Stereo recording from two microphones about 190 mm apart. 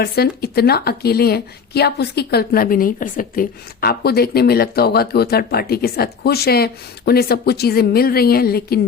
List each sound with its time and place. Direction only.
0.0 s a woman's voice: 55° left (ahead or behind)